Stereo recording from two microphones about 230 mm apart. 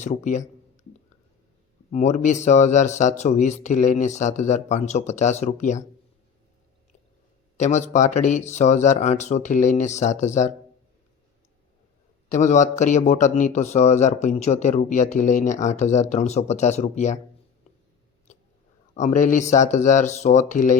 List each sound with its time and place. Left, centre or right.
0.0 s a man's voice: left
1.9 s a man's voice: left
7.5 s a man's voice: left
12.3 s a man's voice: left
18.9 s a man's voice: left